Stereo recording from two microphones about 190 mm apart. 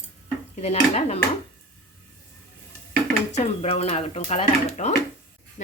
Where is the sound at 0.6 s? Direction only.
35° left (ahead or behind).